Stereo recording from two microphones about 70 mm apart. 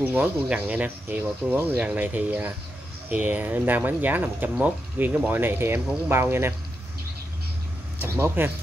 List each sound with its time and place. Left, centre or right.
0.0 s speech: right
0.8 s speech: right
1.8 s speech: centre
8.0 s speech: right